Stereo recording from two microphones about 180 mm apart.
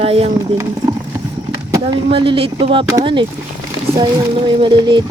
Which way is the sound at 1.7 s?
25° right (ahead or behind).